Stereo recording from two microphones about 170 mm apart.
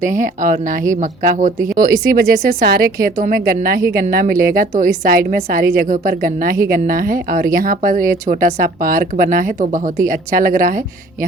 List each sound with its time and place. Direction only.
0.0 s speech: 50° right (ahead or behind)